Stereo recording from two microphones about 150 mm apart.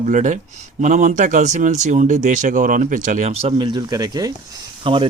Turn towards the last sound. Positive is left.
turn(degrees=-35)  # may be behind; listen again after turning